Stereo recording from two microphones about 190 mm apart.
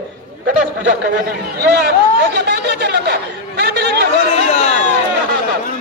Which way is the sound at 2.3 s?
60° right (ahead or behind).